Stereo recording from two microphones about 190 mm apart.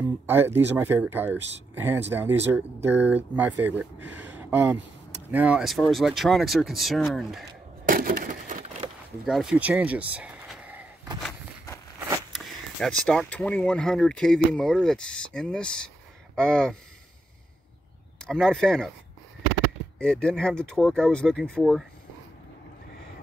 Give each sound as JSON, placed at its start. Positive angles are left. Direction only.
{"t": 0.3, "sound": "speech", "side_deg": -10}
{"t": 7.8, "sound": "a sound", "side_deg": -50}
{"t": 9.2, "sound": "speech", "side_deg": -5}
{"t": 12.8, "sound": "speech", "side_deg": 5}
{"t": 18.2, "sound": "speech", "side_deg": 5}
{"t": 20.0, "sound": "speech", "side_deg": 5}